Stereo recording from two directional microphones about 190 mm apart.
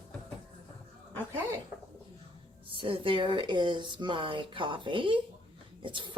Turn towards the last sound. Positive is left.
turn(degrees=-25)  # may be behind; listen again after turning